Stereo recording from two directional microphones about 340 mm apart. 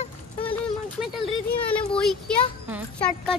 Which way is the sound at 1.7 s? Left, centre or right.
Centre.